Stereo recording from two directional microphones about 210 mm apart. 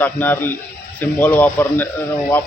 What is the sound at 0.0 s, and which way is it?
Speech, 10° left (ahead or behind).